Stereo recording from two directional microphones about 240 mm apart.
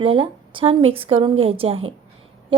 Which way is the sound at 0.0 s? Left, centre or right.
Right.